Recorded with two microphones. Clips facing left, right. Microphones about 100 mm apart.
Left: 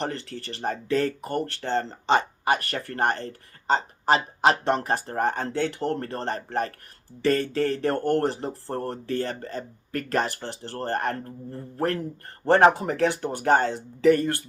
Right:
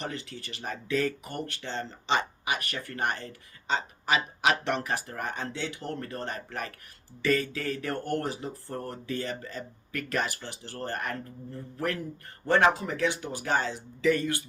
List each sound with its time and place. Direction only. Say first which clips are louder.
0.3 s speech: left 8 dB; 45° left (ahead or behind)
1.8 s speech: left 4 dB; 55° left (ahead or behind)
6.1 s speech: left 8 dB; 35° left (ahead or behind); by 8.4 s 60° left (ahead or behind)
8.7 s speech: left 6 dB; 45° left (ahead or behind)